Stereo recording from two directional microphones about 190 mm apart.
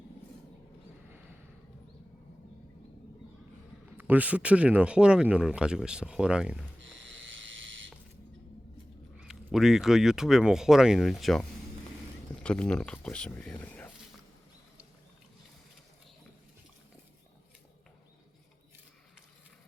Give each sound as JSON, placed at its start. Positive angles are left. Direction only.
{"t": 3.9, "sound": "speech", "side_deg": -10}
{"t": 6.7, "sound": "a sound", "side_deg": -80}
{"t": 9.1, "sound": "speech", "side_deg": 0}